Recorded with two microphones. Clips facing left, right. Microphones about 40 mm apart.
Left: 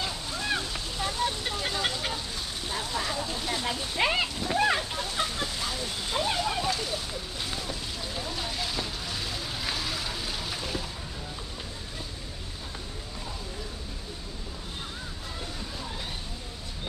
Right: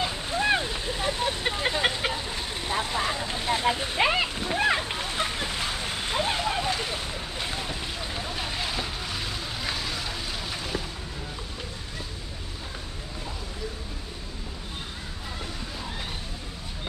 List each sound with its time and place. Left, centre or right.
0.0 s vehicle: right
4.0 s speech: centre
4.5 s splash: right
4.8 s a sound: right; by 10.8 s centre